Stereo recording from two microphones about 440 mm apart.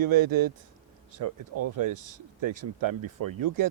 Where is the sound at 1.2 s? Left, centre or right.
Right.